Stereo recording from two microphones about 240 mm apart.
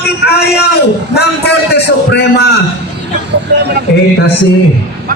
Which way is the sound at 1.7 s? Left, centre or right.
Left.